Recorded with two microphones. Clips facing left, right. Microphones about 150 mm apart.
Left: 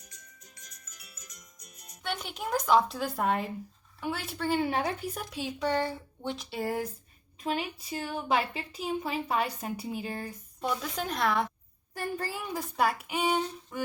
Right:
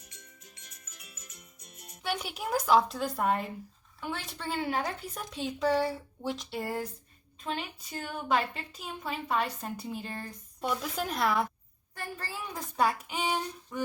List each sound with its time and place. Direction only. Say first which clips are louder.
1.2 s music: right 1 dB; 30° right (ahead or behind)
1.9 s a woman's voice: right 2 dB; 10° right (ahead or behind)
12.5 s a woman's voice: even; 5° left (ahead or behind)